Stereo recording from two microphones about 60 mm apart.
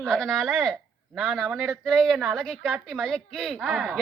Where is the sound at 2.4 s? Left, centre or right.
Centre.